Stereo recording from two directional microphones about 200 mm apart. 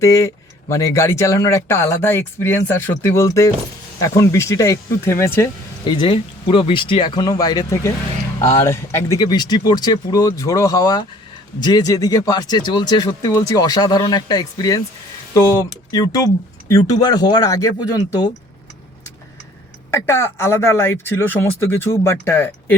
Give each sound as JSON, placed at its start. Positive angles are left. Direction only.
{"t": 0.0, "sound": "speech", "side_deg": 15}
{"t": 19.9, "sound": "speech", "side_deg": 10}